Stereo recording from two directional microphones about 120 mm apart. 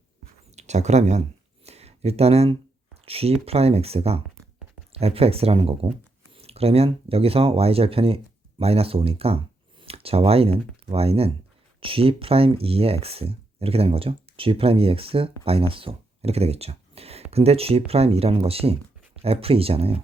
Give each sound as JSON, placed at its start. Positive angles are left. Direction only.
{"t": 0.5, "sound": "speech", "side_deg": -70}
{"t": 1.6, "sound": "a sound", "side_deg": -60}
{"t": 3.4, "sound": "speech", "side_deg": -55}